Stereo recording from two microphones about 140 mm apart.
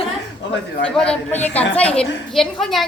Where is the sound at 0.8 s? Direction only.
5° left (ahead or behind).